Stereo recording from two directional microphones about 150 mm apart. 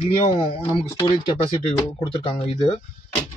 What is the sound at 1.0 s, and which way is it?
Speech, 30° left (ahead or behind).